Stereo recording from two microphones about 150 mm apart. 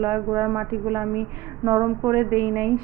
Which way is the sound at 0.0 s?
15° right (ahead or behind).